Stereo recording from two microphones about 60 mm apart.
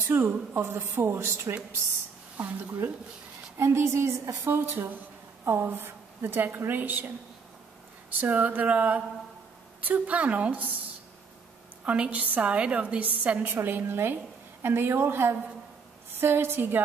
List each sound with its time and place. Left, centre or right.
0.0 s a woman's voice: right
1.2 s a woman's voice: right
2.3 s speech: right
3.5 s a woman's voice: right
4.5 s a woman's voice: right
8.2 s a woman's voice: right
11.8 s a woman's voice: right